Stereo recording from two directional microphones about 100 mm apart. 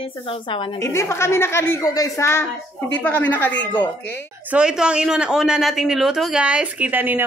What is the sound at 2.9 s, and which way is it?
Speech, 15° left (ahead or behind).